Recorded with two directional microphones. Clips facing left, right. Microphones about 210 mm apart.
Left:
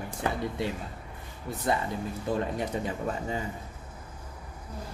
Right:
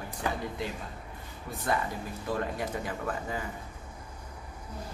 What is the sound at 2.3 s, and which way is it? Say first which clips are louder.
Speech: left 2 dB; 25° left (ahead or behind).